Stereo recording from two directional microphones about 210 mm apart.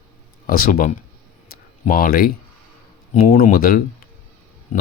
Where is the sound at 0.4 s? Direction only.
45° left (ahead or behind).